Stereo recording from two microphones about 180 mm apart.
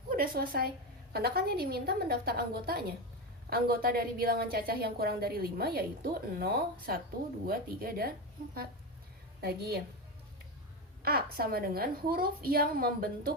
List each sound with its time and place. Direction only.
0.1 s a woman's voice: 55° right (ahead or behind)
9.4 s a woman's voice: 60° right (ahead or behind)
11.0 s a woman's voice: 60° right (ahead or behind)